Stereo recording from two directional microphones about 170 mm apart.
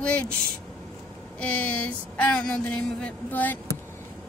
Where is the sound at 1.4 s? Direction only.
10° left (ahead or behind).